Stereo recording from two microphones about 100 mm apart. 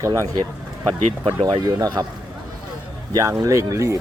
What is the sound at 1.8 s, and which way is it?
Speech, 40° right (ahead or behind).